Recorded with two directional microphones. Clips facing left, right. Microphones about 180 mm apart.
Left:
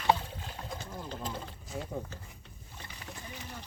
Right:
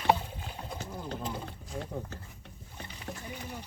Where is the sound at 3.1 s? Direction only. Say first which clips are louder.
Right 6 dB; 55° right (ahead or behind).